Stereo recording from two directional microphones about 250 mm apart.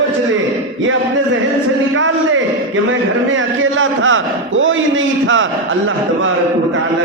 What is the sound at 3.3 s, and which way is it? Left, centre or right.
A man's voice, right.